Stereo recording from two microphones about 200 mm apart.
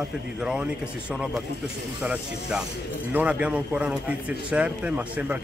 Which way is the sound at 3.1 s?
5° right (ahead or behind).